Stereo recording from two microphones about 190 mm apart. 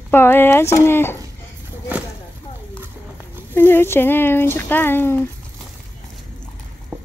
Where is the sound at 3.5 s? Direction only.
10° left (ahead or behind).